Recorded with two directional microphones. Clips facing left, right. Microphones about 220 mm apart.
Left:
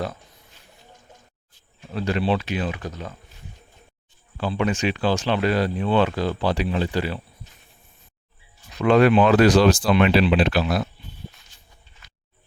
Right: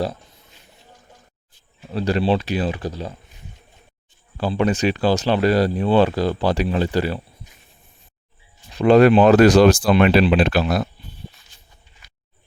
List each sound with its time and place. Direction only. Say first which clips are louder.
1.9 s speech: right 3 dB; 35° right (ahead or behind)
4.4 s speech: right 4 dB; 35° right (ahead or behind)
8.7 s speech: right 4 dB; 35° right (ahead or behind)